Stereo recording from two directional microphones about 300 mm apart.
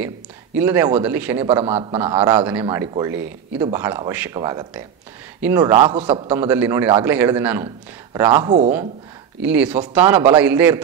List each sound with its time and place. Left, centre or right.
0.6 s a man's voice: centre
1.5 s a man's voice: centre
2.0 s a man's voice: centre
9.5 s a man's voice: centre